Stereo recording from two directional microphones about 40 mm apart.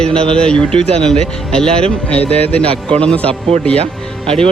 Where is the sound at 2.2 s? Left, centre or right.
Left.